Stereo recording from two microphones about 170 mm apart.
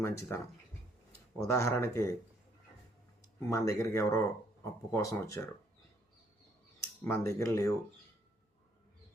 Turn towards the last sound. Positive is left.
turn(degrees=15)  # may be behind; listen again after turning